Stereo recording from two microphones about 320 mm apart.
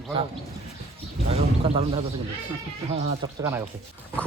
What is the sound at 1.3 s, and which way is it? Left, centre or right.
Speech, centre.